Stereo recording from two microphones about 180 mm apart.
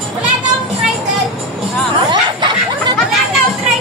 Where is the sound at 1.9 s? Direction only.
25° right (ahead or behind).